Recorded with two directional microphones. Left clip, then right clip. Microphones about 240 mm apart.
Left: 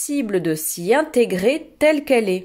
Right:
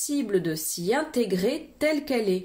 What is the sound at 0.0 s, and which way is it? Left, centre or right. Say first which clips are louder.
A woman's voice: left 4 dB; left.